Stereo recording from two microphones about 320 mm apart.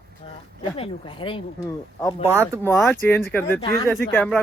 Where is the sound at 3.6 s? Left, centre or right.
Centre.